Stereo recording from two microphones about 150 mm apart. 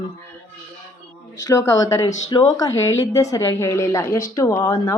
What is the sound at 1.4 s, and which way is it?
Speech, 20° left (ahead or behind).